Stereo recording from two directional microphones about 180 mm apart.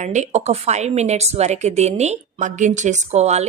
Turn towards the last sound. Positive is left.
turn(degrees=-40)  # may be behind; listen again after turning